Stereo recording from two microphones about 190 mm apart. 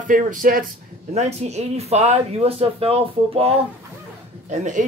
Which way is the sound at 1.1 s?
35° right (ahead or behind).